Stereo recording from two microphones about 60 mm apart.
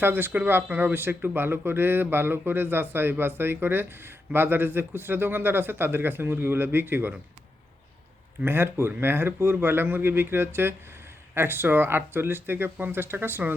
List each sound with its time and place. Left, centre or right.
0.0 s speech: right
8.4 s speech: right